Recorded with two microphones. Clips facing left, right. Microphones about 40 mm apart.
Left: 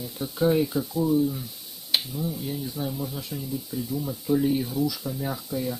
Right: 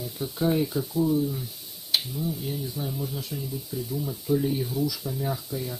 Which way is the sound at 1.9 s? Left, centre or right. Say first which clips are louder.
Even; left.